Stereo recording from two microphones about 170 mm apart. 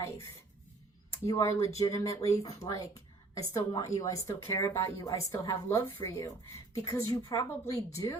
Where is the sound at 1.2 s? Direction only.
20° left (ahead or behind).